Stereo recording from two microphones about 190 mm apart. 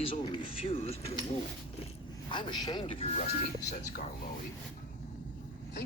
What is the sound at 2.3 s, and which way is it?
Speech, 25° left (ahead or behind).